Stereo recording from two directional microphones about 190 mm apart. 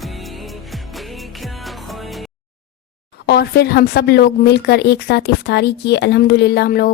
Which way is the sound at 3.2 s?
60° left (ahead or behind).